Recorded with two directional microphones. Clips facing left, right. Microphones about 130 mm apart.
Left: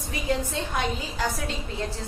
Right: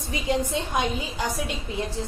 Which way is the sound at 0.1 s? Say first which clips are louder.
Right 2 dB; 20° right (ahead or behind).